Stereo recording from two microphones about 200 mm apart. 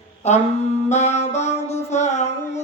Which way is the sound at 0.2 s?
35° left (ahead or behind).